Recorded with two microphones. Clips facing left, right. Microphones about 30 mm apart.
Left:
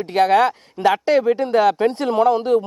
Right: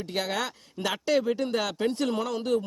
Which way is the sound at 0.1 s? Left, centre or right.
Left.